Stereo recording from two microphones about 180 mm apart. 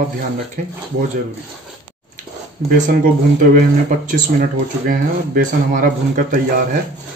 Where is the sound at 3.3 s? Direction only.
50° right (ahead or behind).